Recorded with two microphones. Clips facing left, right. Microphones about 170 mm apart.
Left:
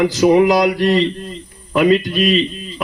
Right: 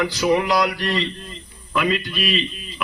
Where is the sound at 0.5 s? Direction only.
20° left (ahead or behind).